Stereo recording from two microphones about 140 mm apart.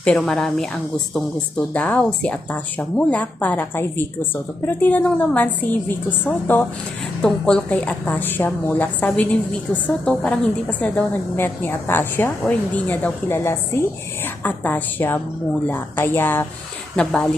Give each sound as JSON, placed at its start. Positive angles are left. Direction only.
{"t": 0.0, "sound": "a woman's voice", "side_deg": 5}